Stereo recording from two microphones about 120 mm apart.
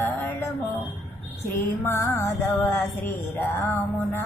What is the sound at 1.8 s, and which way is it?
Music, 20° left (ahead or behind).